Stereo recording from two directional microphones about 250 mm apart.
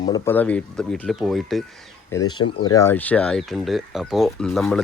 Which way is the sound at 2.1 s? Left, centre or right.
Centre.